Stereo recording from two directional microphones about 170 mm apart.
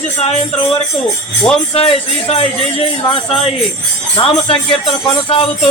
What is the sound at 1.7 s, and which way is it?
A man's voice, 35° left (ahead or behind).